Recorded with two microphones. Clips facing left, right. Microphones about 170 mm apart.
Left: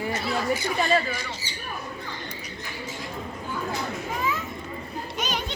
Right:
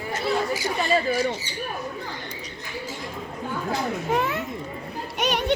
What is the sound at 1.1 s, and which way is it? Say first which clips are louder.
Speech: right 10 dB; 35° right (ahead or behind).